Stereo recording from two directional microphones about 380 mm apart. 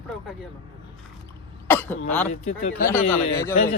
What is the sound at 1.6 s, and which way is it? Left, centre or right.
Throat clearing, centre.